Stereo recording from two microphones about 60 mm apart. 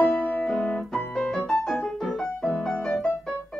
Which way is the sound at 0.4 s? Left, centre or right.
Centre.